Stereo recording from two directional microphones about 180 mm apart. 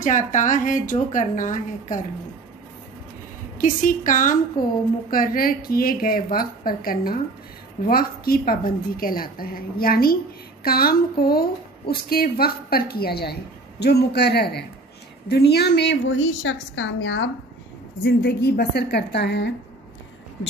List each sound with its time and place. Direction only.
0.0 s a woman's voice: 45° left (ahead or behind)
3.5 s a woman's voice: 45° left (ahead or behind); by 17.3 s 90° left
18.0 s a woman's voice: 65° left (ahead or behind)